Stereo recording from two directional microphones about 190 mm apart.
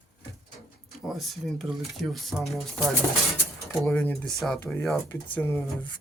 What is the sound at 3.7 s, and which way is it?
Speech, 5° left (ahead or behind).